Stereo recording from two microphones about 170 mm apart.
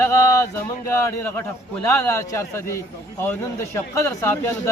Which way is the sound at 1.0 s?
15° left (ahead or behind).